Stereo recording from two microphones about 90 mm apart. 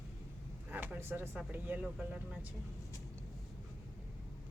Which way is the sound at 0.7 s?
20° right (ahead or behind).